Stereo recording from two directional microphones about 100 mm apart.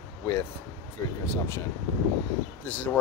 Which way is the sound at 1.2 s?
25° left (ahead or behind).